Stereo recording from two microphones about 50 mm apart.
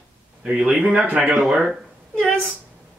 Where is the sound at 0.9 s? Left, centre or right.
Right.